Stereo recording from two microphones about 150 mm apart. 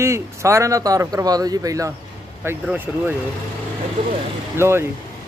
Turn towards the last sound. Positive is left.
turn(degrees=-15)  # may be behind; listen again after turning